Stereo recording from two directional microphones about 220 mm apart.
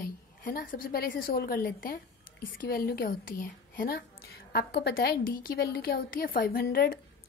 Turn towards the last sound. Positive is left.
turn(degrees=40)  # may be behind; listen again after turning